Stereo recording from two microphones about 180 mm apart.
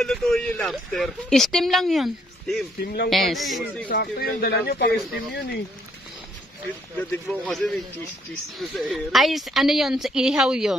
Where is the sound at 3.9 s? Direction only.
60° left (ahead or behind).